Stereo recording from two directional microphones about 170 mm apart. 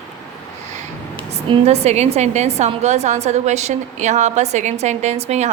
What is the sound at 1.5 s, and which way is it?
A woman's voice, 40° right (ahead or behind).